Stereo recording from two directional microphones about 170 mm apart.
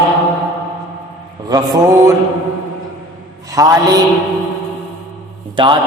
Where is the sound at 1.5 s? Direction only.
20° right (ahead or behind).